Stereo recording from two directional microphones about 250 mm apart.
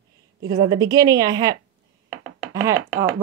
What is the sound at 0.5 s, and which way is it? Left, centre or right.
A woman's voice, centre.